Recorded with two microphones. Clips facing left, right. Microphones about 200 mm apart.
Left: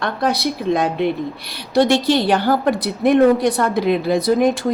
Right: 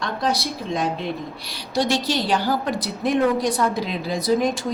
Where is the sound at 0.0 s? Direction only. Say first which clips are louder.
Left 4 dB; 60° left (ahead or behind).